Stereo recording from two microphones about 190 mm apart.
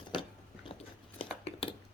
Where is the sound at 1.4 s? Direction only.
30° left (ahead or behind).